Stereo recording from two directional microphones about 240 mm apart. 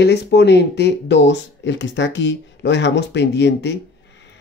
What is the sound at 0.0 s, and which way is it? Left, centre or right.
Speech, left.